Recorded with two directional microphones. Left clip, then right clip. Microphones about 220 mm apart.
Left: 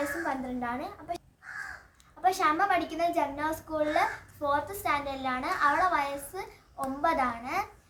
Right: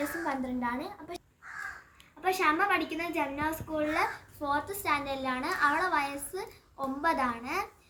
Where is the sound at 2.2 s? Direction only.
Centre (ahead or behind).